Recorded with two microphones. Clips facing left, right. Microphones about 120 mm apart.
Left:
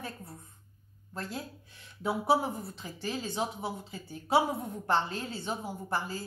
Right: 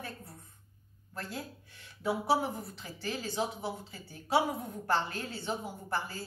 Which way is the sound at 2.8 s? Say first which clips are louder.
Left 2 dB; 20° left (ahead or behind).